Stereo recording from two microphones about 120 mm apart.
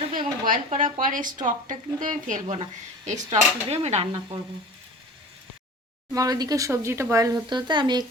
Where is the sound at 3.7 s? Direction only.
65° right (ahead or behind).